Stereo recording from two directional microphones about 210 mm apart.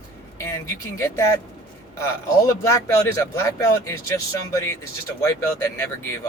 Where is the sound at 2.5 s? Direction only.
15° left (ahead or behind).